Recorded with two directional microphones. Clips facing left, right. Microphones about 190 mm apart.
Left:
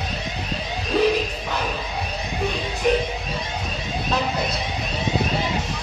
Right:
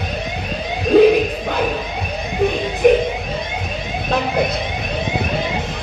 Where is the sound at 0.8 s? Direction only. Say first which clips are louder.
Right 9 dB; 55° right (ahead or behind).